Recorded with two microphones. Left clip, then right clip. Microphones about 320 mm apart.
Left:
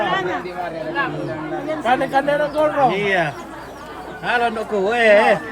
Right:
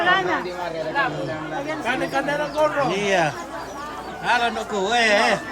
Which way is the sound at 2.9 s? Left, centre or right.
Centre.